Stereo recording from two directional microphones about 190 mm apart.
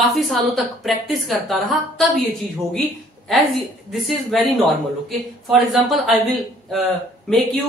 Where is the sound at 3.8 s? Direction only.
Centre (ahead or behind).